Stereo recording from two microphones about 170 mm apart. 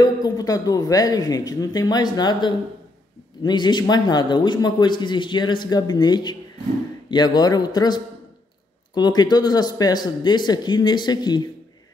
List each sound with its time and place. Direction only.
0.0 s a man's voice: 20° left (ahead or behind)